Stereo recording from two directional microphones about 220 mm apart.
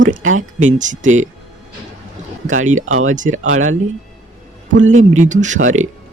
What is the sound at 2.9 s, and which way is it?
Speech, 70° right (ahead or behind).